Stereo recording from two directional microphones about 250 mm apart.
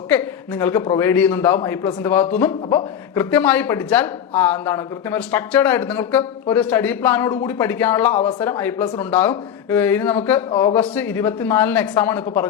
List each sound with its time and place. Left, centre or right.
0.1 s speech: centre
10.5 s speech: centre
10.8 s speech: centre